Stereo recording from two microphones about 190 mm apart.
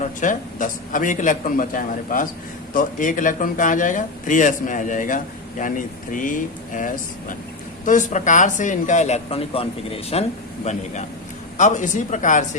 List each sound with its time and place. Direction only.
0.2 s speech: 45° left (ahead or behind)